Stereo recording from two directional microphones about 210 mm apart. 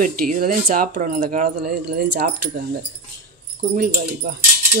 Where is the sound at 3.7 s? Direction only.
45° right (ahead or behind).